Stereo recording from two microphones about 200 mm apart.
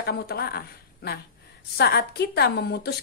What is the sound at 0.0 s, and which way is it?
A woman's voice, 50° left (ahead or behind).